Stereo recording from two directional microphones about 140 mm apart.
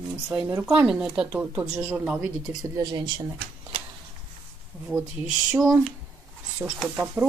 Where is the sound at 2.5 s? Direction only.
30° right (ahead or behind).